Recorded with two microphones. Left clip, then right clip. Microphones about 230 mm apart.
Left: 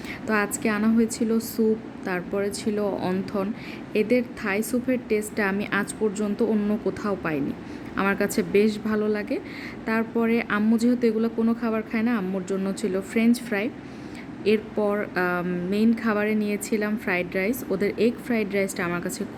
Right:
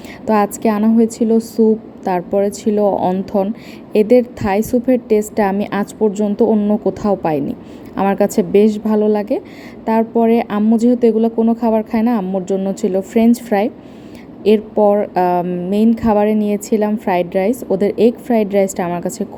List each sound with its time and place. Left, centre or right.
0.3 s a woman's voice: centre